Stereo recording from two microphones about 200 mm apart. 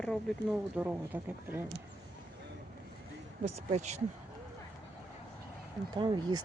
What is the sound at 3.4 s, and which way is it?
Speech, 35° right (ahead or behind).